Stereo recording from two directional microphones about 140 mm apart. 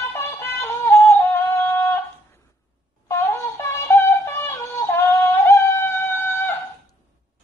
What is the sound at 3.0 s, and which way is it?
Synthetic singing, 20° left (ahead or behind).